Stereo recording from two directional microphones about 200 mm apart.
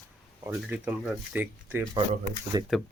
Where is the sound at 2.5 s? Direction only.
20° right (ahead or behind).